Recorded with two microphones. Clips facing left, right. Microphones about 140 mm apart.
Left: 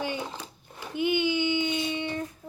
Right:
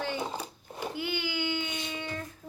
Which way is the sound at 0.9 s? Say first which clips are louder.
Left 10 dB; 20° left (ahead or behind).